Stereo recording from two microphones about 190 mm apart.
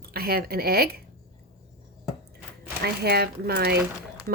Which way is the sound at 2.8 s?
55° right (ahead or behind).